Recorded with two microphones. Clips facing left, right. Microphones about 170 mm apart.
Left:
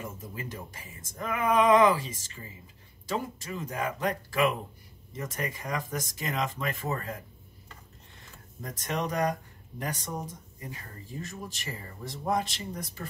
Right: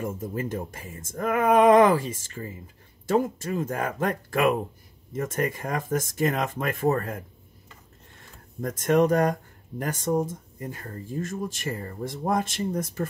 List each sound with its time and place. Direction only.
0.0 s speech: 50° right (ahead or behind)
8.5 s speech: 50° right (ahead or behind)